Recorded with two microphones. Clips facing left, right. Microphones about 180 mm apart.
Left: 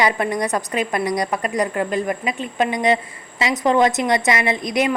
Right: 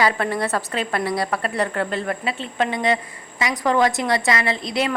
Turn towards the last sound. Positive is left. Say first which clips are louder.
# left 3 dB
turn(degrees=15)  # may be behind; listen again after turning